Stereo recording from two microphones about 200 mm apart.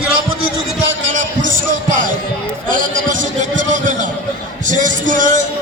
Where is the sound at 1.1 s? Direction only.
40° right (ahead or behind).